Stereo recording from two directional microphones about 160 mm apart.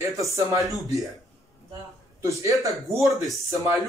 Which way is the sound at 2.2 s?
20° right (ahead or behind).